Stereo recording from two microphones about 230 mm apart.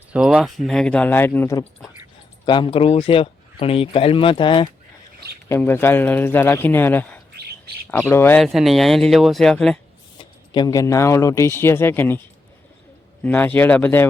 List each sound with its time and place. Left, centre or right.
0.1 s speech: centre; by 4.7 s left
5.5 s speech: centre
7.3 s bird: right
8.1 s speech: centre
10.5 s speech: centre
13.2 s speech: centre